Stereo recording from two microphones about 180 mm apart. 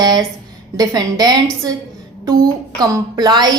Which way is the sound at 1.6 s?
20° right (ahead or behind).